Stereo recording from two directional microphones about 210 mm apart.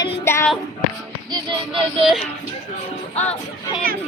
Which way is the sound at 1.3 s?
25° right (ahead or behind).